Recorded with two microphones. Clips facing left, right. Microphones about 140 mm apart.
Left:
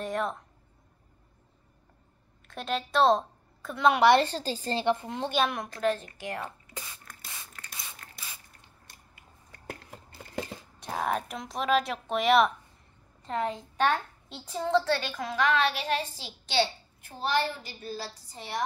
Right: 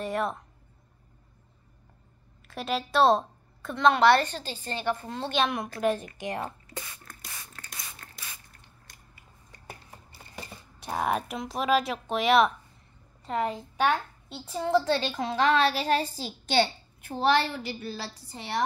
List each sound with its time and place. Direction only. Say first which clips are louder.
0.0 s speech: right 1 dB; 5° right (ahead or behind)
2.4 s a woman's voice: right 1 dB; 5° right (ahead or behind)
4.2 s a woman's voice: left 4 dB; 35° left (ahead or behind)
5.0 s a woman's voice: left 1 dB; 15° left (ahead or behind)
5.4 s speech: right 2 dB; centre (ahead or behind)
5.8 s a woman's voice: right 1 dB; 15° right (ahead or behind)
10.8 s a woman's voice: right 2 dB; centre (ahead or behind)
14.9 s a child's voice: right 2 dB; 25° right (ahead or behind); by 17.1 s 50° right (ahead or behind)
17.1 s a woman's voice: right 4 dB; 70° right (ahead or behind)